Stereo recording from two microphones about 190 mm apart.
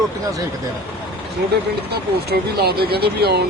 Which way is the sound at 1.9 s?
55° right (ahead or behind).